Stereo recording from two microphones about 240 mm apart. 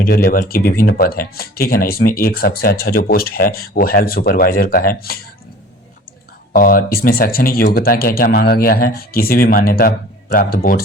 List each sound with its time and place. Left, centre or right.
0.0 s speech: left
6.5 s speech: left